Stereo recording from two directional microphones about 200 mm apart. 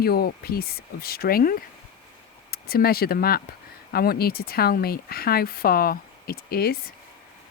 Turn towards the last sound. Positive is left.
turn(degrees=50)  # may be behind; listen again after turning